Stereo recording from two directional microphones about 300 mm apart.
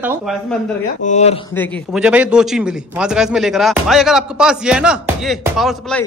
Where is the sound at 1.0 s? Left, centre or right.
Left.